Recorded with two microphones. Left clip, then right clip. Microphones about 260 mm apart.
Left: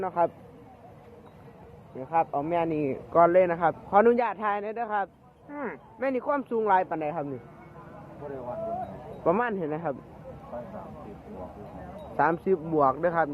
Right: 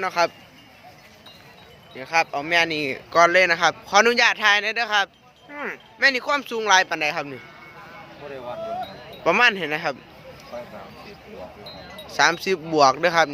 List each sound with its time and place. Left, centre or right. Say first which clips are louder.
0.0 s speech: right 5 dB; right
2.0 s speech: right 4 dB; centre
5.5 s speech: right 4 dB; right
6.0 s speech: right 8 dB; centre
9.2 s speech: right 8 dB; right
12.1 s speech: right 5 dB; centre
12.7 s speech: right 8 dB; right